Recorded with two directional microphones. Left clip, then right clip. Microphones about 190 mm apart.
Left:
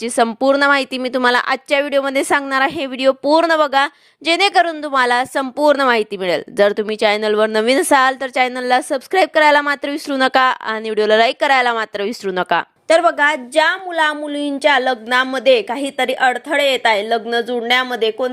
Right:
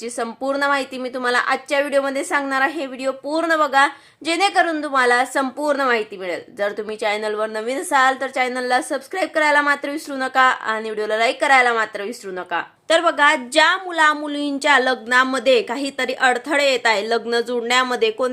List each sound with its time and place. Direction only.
0.0 s a woman's voice: 45° left (ahead or behind)
12.9 s a woman's voice: 20° left (ahead or behind); by 18.3 s 5° left (ahead or behind)